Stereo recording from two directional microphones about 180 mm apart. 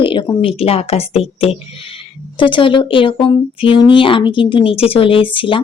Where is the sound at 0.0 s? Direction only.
25° left (ahead or behind).